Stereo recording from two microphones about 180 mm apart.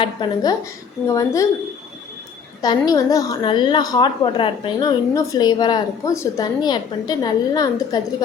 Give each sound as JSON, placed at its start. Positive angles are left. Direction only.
{"t": 0.0, "sound": "a woman's voice", "side_deg": 25}
{"t": 2.6, "sound": "a woman's voice", "side_deg": 20}